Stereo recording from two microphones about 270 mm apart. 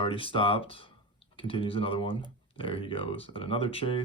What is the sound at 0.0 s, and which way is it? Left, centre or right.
Speech, centre.